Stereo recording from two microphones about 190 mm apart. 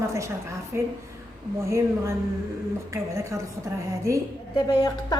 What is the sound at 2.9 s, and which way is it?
Speech, 15° right (ahead or behind).